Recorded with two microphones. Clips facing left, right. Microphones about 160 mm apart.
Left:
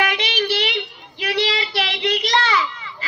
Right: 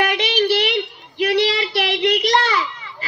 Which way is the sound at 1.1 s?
55° right (ahead or behind).